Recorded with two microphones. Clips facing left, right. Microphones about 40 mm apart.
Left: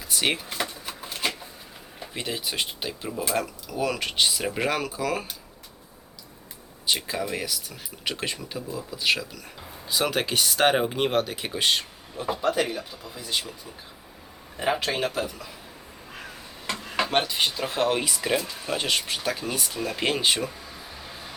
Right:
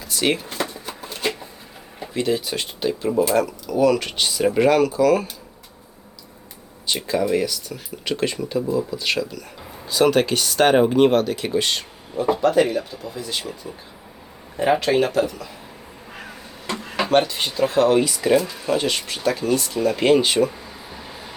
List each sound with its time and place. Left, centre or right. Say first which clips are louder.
0.1 s speech: right 5 dB; centre
0.9 s shuffling cards: right 4 dB; centre
2.1 s speech: right 7 dB; centre
6.8 s speech: right 6 dB; centre
12.1 s speech: right 9 dB; centre
12.5 s speech: right 8 dB; centre
14.6 s speech: right 7 dB; centre
17.1 s speech: right 7 dB; centre
19.8 s speech: right 8 dB; centre